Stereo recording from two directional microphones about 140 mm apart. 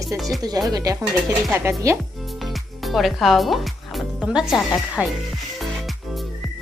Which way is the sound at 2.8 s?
Centre (ahead or behind).